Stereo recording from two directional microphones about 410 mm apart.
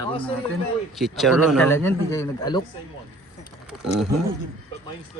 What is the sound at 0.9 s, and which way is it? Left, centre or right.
A man's voice, centre.